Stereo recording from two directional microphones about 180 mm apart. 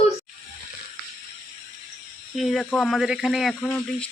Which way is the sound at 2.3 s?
Centre (ahead or behind).